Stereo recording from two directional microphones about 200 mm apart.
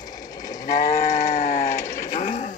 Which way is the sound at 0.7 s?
50° left (ahead or behind).